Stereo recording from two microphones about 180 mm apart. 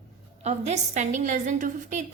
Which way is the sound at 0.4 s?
40° right (ahead or behind).